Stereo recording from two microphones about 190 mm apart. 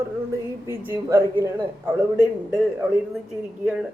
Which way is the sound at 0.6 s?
15° right (ahead or behind).